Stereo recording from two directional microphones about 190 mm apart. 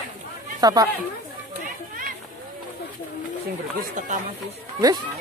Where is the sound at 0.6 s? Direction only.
20° right (ahead or behind).